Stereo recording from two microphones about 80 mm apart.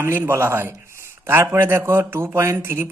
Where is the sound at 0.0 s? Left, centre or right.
Right.